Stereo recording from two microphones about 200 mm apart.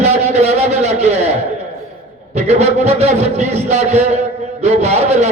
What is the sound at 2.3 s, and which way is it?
A man's voice, 35° right (ahead or behind).